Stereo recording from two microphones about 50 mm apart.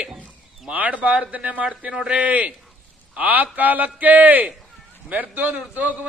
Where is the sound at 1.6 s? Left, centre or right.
Centre.